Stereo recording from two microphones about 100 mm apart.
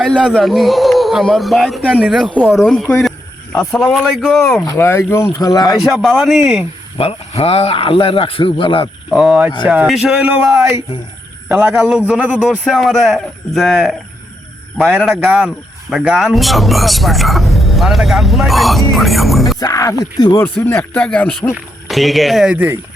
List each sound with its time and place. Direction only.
0.3 s speech: centre (ahead or behind)
4.8 s speech: 25° left (ahead or behind)
5.3 s speech: 40° left (ahead or behind)
5.8 s speech: centre (ahead or behind)
6.9 s speech: 80° left; by 8.9 s 60° left (ahead or behind)
9.0 s a man's voice: 5° right (ahead or behind)
19.5 s speech: 35° left (ahead or behind)
20.3 s speech: 25° left (ahead or behind)
21.8 s speech: centre (ahead or behind)
22.5 s speech: 15° right (ahead or behind)